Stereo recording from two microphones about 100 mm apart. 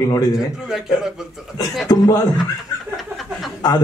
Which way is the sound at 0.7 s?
5° right (ahead or behind).